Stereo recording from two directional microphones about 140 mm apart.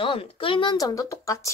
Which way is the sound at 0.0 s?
40° left (ahead or behind).